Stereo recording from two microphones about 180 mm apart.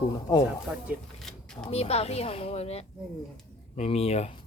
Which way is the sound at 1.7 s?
35° left (ahead or behind).